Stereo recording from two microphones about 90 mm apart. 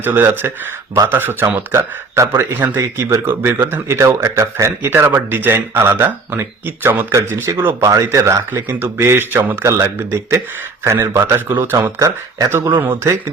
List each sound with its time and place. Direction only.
0.0 s speech: 25° right (ahead or behind)
7.9 s speech: 35° right (ahead or behind)